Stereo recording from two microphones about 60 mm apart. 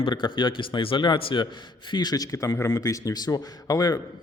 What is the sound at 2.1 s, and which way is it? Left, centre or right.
A man's voice, left.